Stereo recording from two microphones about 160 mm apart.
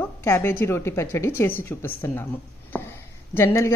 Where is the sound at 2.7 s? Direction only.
15° left (ahead or behind).